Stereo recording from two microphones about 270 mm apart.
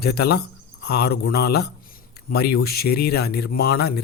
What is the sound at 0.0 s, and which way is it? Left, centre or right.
Speech, left.